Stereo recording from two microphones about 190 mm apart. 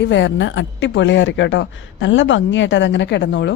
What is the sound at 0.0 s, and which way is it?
A woman's voice, 70° left (ahead or behind).